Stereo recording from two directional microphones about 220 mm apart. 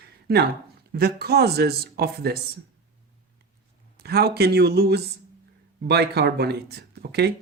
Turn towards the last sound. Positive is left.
turn(degrees=-45)  # may be behind; listen again after turning